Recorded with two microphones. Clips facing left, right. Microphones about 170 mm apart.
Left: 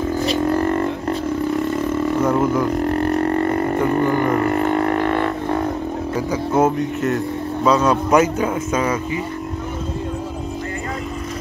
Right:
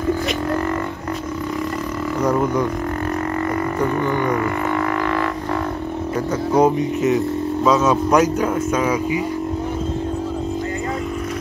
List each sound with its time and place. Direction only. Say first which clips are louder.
0.3 s didgeridoo: left 3 dB; 30° left (ahead or behind)
2.2 s speech: right 2 dB; 5° left (ahead or behind)
5.1 s music: left 2 dB; 25° left (ahead or behind)
6.5 s speech: right 2 dB; centre (ahead or behind)